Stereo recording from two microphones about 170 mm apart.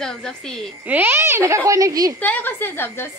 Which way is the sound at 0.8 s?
10° right (ahead or behind).